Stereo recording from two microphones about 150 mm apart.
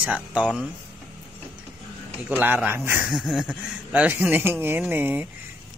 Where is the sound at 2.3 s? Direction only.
10° right (ahead or behind).